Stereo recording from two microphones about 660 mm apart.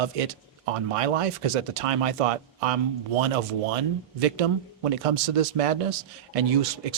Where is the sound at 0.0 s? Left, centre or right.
Right.